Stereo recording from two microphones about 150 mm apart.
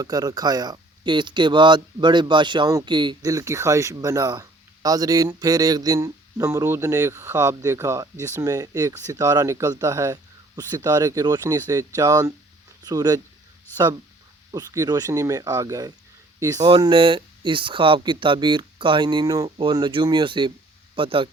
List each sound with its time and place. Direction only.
0.0 s speech: 25° right (ahead or behind)
14.5 s speech: 25° right (ahead or behind)